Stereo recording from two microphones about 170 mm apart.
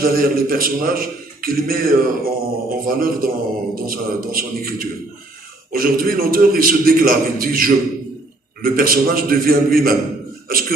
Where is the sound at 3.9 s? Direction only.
60° right (ahead or behind).